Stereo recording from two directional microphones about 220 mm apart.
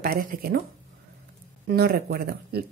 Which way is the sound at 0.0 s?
40° right (ahead or behind).